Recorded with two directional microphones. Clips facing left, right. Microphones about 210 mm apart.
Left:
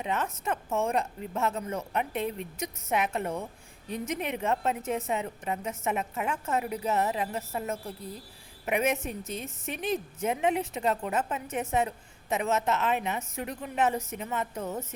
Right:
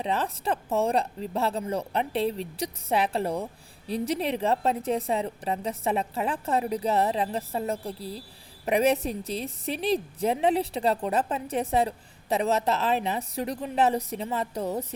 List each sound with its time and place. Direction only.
0.0 s a woman's voice: 35° right (ahead or behind)